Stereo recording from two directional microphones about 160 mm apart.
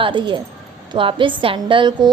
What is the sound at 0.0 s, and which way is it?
A woman's voice, 30° right (ahead or behind).